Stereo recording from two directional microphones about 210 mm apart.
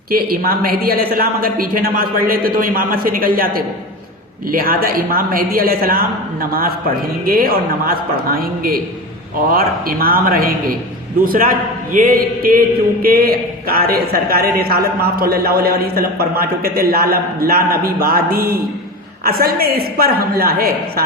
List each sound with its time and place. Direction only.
0.1 s speech: 45° right (ahead or behind)